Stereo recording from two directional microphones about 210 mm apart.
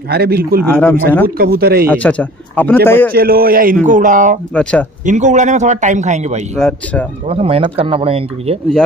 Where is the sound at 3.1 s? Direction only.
45° right (ahead or behind).